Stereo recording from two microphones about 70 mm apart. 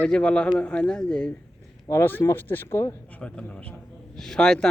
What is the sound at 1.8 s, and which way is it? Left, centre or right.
Speech, left.